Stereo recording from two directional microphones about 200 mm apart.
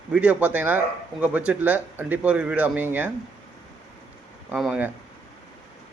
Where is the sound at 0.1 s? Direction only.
5° right (ahead or behind).